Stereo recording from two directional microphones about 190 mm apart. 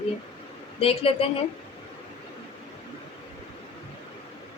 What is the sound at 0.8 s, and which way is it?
Speech, 30° left (ahead or behind).